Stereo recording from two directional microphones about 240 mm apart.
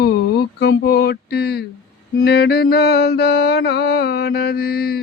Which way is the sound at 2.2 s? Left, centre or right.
Left.